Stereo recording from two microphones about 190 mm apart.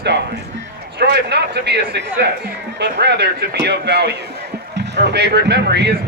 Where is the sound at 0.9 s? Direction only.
60° right (ahead or behind).